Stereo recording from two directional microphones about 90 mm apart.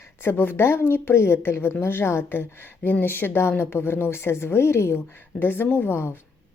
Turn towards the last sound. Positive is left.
turn(degrees=25)  # may be behind; listen again after turning